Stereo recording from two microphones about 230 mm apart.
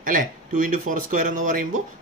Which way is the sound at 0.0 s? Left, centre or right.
Right.